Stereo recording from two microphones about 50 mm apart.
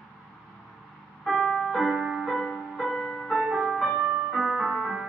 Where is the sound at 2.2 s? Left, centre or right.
Centre.